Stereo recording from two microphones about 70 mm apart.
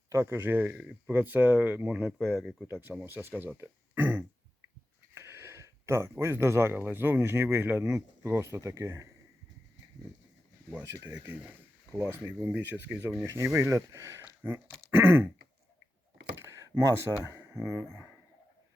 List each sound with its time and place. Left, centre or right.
0.1 s speech: right
1.9 s speech: centre
2.6 s speech: right
3.6 s a sound: right
5.1 s a sound: right
6.7 s speech: right
11.2 s speech: right
13.2 s speech: right
14.8 s throat clearing: right
16.4 s a sound: right
17.6 s speech: right